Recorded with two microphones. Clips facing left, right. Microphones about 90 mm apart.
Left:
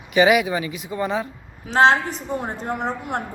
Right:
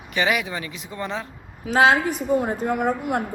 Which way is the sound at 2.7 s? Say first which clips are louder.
Right 2 dB; 50° right (ahead or behind).